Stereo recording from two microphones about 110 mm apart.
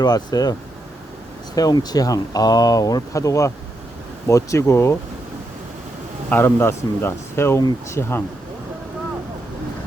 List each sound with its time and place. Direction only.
0.0 s speech: 40° left (ahead or behind)
1.5 s speech: 35° left (ahead or behind)
6.3 s speech: 20° left (ahead or behind)